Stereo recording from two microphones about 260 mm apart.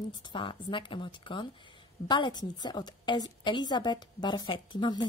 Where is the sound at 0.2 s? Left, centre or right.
Centre.